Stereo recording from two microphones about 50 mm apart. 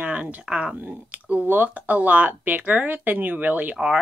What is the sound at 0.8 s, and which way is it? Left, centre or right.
Speech, right.